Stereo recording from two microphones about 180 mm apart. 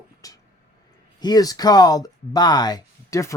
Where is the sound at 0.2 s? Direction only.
20° left (ahead or behind).